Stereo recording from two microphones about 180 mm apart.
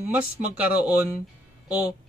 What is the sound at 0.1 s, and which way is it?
Speech, 5° right (ahead or behind).